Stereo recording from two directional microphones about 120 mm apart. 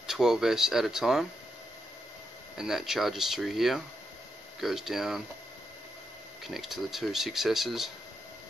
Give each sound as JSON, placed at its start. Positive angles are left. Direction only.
{"t": 0.0, "sound": "speech", "side_deg": -5}
{"t": 2.5, "sound": "speech", "side_deg": -5}
{"t": 6.4, "sound": "speech", "side_deg": 0}